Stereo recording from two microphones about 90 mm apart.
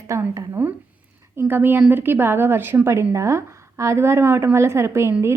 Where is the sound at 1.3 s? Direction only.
25° right (ahead or behind).